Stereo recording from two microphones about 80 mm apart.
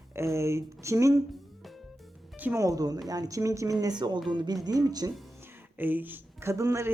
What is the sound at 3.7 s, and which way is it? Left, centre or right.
Speech, right.